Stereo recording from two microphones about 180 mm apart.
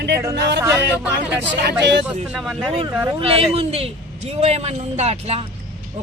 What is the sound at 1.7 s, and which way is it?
Speech, 70° right (ahead or behind).